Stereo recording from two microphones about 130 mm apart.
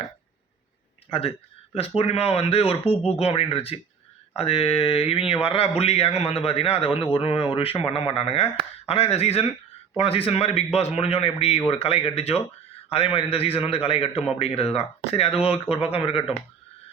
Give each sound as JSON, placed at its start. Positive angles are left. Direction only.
{"t": 2.0, "sound": "speech", "side_deg": 50}